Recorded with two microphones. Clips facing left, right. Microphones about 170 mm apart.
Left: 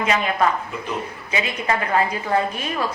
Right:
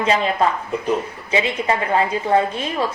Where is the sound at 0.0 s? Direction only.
30° right (ahead or behind).